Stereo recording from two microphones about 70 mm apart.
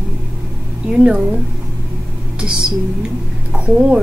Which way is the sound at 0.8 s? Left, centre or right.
Centre.